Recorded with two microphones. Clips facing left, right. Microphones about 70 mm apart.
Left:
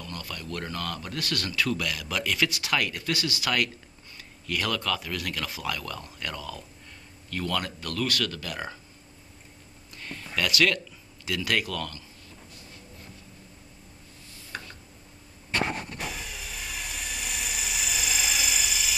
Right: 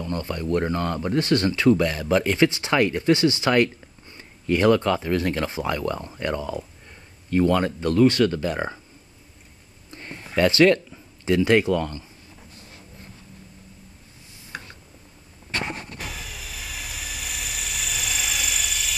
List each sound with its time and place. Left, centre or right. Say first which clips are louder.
0.0 s speech: right 10 dB; right
9.8 s speech: right 2 dB; right
14.5 s tick: right 2 dB; centre
16.0 s a sound: even; centre